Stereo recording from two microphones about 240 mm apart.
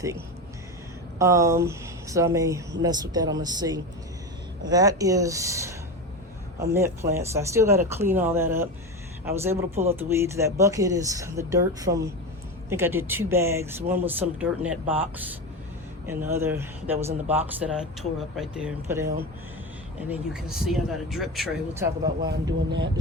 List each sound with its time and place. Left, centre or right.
1.2 s speech: centre
22.3 s speech: right